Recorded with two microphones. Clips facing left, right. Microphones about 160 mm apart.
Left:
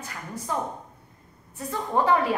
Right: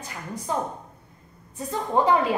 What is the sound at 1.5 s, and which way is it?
Speech, 15° right (ahead or behind).